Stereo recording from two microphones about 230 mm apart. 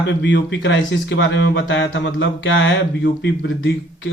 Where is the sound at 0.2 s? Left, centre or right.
Left.